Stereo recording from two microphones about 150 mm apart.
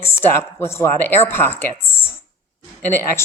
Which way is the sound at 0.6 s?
15° left (ahead or behind).